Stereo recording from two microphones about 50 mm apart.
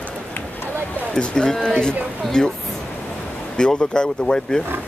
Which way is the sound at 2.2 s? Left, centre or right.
Centre.